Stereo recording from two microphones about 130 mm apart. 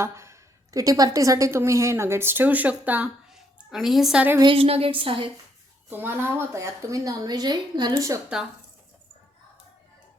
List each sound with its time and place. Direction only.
0.0 s a woman's voice: 20° right (ahead or behind)
4.4 s a woman's voice: 40° right (ahead or behind)
5.9 s a woman's voice: 15° right (ahead or behind)